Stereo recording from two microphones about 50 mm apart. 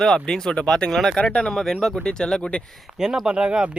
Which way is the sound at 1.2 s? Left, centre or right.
Left.